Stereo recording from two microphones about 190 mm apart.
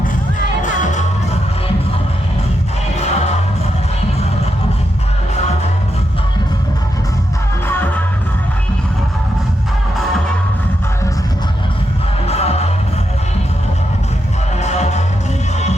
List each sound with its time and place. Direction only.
0.6 s music: 40° left (ahead or behind)
3.0 s music: 35° left (ahead or behind)
7.7 s music: 10° left (ahead or behind)
12.3 s music: 35° left (ahead or behind)
14.6 s music: 35° left (ahead or behind)